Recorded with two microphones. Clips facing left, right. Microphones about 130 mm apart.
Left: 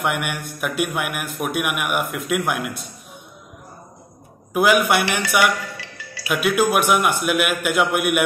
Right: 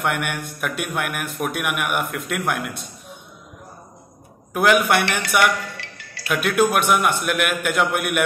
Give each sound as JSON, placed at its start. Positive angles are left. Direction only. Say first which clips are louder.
{"t": 0.0, "sound": "a man's voice", "louder": "even", "side_deg": 5}
{"t": 4.6, "sound": "a man's voice", "louder": "even", "side_deg": 5}